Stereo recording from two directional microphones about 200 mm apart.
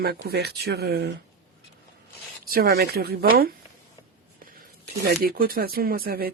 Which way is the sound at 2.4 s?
50° right (ahead or behind).